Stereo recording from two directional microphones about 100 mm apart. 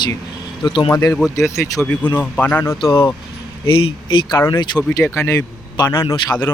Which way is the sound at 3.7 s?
60° left (ahead or behind).